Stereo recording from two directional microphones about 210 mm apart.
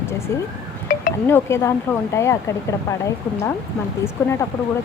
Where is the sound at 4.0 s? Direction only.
10° left (ahead or behind).